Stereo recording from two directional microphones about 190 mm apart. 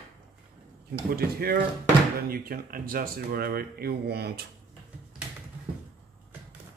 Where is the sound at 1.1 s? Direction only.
55° right (ahead or behind).